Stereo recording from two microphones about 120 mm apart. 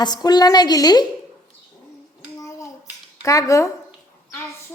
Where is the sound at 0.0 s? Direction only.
35° left (ahead or behind).